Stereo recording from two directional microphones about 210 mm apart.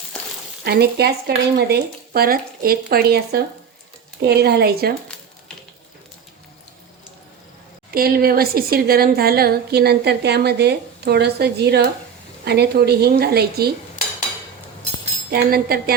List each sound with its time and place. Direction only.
0.6 s a woman's voice: 50° right (ahead or behind)
7.9 s a woman's voice: 45° right (ahead or behind)
15.3 s a woman's voice: 45° right (ahead or behind)